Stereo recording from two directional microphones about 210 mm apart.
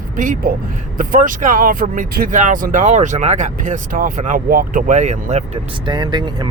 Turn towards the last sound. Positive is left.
turn(degrees=-20)  # may be behind; listen again after turning